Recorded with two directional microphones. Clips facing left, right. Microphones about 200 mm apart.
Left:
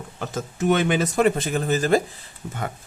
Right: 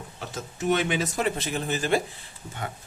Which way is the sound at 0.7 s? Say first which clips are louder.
Left 4 dB; 50° left (ahead or behind).